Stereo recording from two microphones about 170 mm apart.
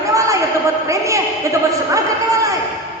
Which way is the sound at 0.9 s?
20° right (ahead or behind).